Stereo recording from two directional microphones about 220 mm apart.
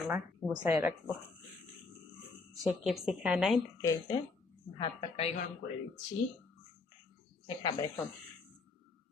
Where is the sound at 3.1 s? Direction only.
5° right (ahead or behind).